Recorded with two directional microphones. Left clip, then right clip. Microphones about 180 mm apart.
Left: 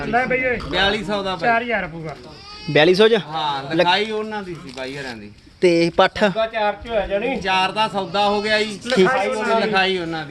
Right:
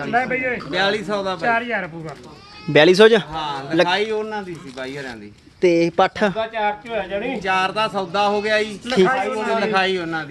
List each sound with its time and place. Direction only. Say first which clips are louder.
0.1 s speech: left 2 dB; centre (ahead or behind)
0.7 s speech: right 2 dB; 10° right (ahead or behind)
1.4 s speech: left 3 dB; 5° left (ahead or behind)
2.7 s speech: right 2 dB; 20° right (ahead or behind)
3.3 s speech: even; 10° right (ahead or behind)
6.3 s speech: left 2 dB; 25° left (ahead or behind)
7.4 s speech: right 1 dB; 10° right (ahead or behind)